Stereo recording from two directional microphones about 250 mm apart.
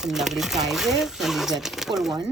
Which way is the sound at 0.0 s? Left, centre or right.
Centre.